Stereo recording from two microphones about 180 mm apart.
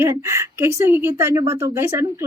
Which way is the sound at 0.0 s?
15° right (ahead or behind).